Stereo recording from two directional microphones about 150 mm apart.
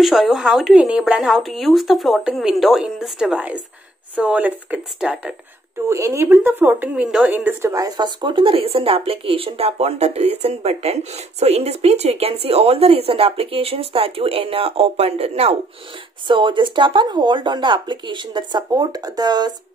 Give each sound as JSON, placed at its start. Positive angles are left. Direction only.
{"t": 0.0, "sound": "a woman's voice", "side_deg": 0}
{"t": 5.9, "sound": "a woman's voice", "side_deg": -20}
{"t": 7.7, "sound": "speech", "side_deg": -25}